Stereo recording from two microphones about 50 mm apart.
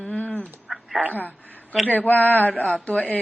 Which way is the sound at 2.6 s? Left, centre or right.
Left.